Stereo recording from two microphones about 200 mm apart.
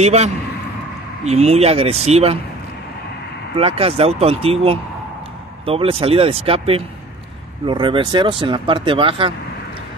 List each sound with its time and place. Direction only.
0.0 s speech: 35° right (ahead or behind)
3.5 s speech: 30° right (ahead or behind)